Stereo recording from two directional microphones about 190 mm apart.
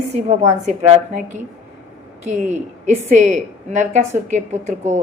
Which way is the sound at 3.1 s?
40° right (ahead or behind).